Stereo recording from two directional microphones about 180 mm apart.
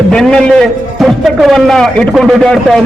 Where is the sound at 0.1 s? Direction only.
5° left (ahead or behind).